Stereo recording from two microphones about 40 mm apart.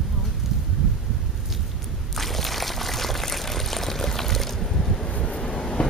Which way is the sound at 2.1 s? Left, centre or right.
Centre.